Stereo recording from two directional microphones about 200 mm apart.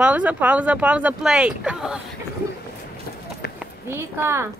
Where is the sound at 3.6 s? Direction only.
10° right (ahead or behind).